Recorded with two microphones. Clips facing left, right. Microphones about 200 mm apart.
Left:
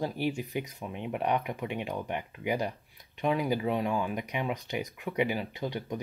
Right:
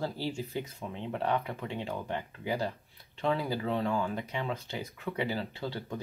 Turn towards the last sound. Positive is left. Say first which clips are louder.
# left 3 dB
turn(degrees=15)  # may be behind; listen again after turning